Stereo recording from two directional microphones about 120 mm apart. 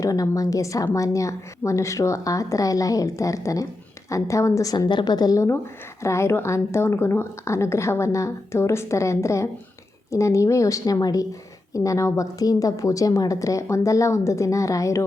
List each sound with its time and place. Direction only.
0.0 s a woman's voice: 30° left (ahead or behind)